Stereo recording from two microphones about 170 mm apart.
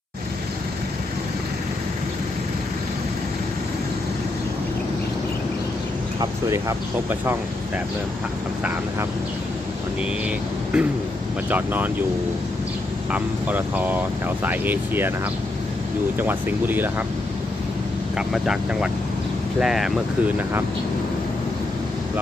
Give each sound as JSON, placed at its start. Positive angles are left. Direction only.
{"t": 6.1, "sound": "speech", "side_deg": -15}
{"t": 10.0, "sound": "speech", "side_deg": -5}
{"t": 13.1, "sound": "speech", "side_deg": -10}
{"t": 18.2, "sound": "speech", "side_deg": -5}